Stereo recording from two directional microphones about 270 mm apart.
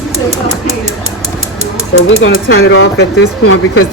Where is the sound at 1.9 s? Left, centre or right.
Left.